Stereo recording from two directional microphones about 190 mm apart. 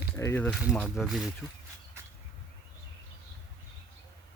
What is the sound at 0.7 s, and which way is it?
Speech, centre (ahead or behind).